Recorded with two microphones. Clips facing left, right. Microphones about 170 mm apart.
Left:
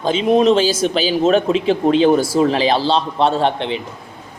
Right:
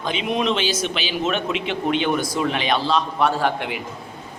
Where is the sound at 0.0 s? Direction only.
35° left (ahead or behind).